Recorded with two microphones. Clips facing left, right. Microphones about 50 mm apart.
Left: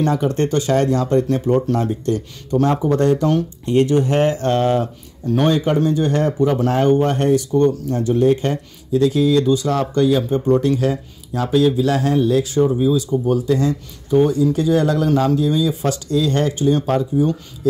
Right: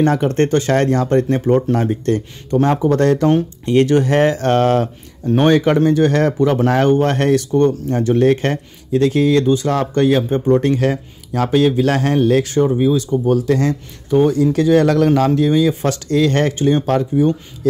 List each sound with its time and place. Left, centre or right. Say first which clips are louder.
0.0 s speech: right 3 dB; right
2.9 s speech: right 3 dB; right
5.2 s speech: right 3 dB; right
5.5 s speech: right 6 dB; right
7.5 s speech: right 2 dB; right
13.5 s speech: right 1 dB; right
15.2 s speech: right 3 dB; right